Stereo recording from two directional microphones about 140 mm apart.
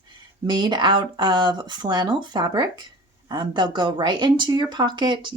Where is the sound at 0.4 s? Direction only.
30° right (ahead or behind).